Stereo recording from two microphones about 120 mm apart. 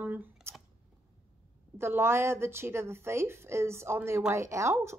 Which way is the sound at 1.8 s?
20° right (ahead or behind).